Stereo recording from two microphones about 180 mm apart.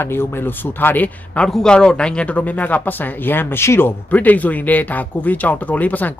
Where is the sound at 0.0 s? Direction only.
15° left (ahead or behind).